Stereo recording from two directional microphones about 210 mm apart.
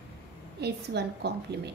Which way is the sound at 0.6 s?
50° right (ahead or behind).